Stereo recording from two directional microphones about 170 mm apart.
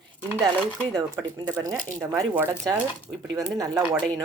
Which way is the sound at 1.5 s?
20° right (ahead or behind).